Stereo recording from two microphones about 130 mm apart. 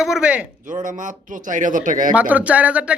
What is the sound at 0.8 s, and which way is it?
Speech, 80° right.